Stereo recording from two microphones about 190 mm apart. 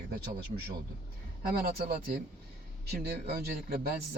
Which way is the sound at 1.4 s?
55° right (ahead or behind).